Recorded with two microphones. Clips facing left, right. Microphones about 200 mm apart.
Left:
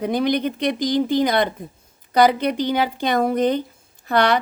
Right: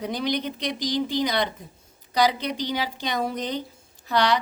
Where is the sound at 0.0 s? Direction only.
55° left (ahead or behind).